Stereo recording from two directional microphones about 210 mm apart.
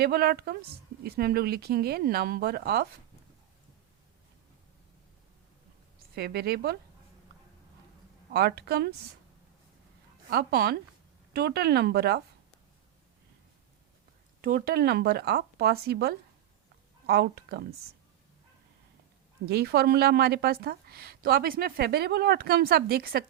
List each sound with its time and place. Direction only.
0.0 s a woman's voice: 45° right (ahead or behind)
6.1 s a woman's voice: 45° right (ahead or behind)
8.3 s a woman's voice: 50° right (ahead or behind)
10.2 s a woman's voice: 50° right (ahead or behind)
14.4 s a woman's voice: 45° right (ahead or behind)
19.5 s a woman's voice: 50° right (ahead or behind)